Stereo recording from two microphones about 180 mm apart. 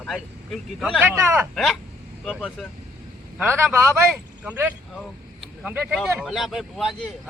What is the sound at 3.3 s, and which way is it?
Speech, 15° right (ahead or behind).